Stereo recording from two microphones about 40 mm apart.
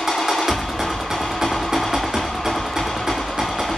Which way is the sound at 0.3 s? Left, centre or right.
Centre.